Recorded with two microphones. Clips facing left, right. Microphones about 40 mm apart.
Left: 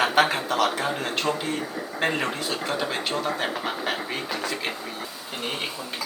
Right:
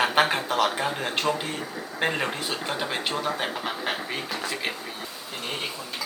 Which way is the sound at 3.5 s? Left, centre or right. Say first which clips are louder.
Left 1 dB; centre.